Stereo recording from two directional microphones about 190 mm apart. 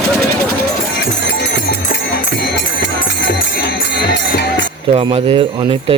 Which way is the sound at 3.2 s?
65° left (ahead or behind).